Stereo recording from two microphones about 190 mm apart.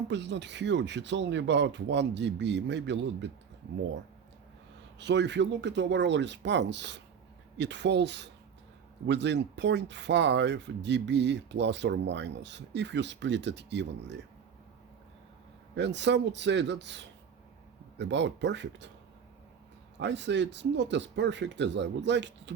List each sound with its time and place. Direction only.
0.1 s speech: 70° right (ahead or behind)
4.9 s speech: 65° right (ahead or behind)
15.7 s speech: 70° right (ahead or behind)
20.0 s speech: 70° right (ahead or behind)